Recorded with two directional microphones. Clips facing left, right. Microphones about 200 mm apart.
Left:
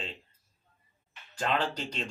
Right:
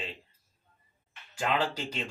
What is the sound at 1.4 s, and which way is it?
Speech, 10° right (ahead or behind).